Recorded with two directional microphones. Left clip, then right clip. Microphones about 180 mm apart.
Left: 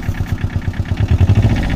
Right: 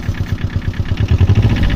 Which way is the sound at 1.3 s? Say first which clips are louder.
Even; 60° left (ahead or behind).